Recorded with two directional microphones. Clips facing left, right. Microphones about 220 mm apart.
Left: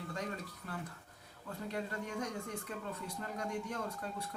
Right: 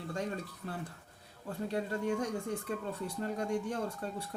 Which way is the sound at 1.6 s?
30° right (ahead or behind).